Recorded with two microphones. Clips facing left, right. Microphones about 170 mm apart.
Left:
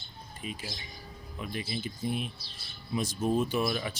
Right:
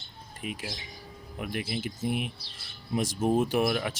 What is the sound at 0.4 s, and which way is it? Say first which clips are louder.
Speech: right 3 dB; 65° right (ahead or behind).